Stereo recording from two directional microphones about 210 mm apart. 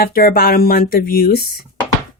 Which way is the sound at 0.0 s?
45° left (ahead or behind).